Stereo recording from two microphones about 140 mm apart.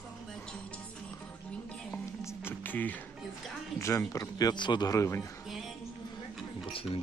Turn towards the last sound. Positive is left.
turn(degrees=40)  # may be behind; listen again after turning